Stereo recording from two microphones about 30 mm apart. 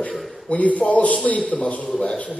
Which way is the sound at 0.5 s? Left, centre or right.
Left.